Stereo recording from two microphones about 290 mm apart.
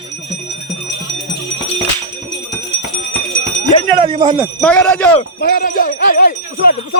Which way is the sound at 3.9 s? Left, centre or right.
Centre.